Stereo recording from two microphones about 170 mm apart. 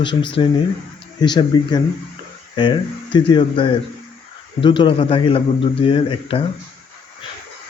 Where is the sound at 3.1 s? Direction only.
30° left (ahead or behind).